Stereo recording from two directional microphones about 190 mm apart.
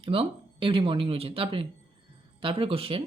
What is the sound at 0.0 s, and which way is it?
A woman's voice, 30° right (ahead or behind).